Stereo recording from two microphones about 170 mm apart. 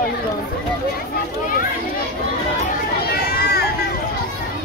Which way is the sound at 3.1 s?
65° left (ahead or behind).